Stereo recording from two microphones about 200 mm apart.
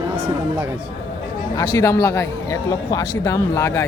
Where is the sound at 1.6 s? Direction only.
20° left (ahead or behind).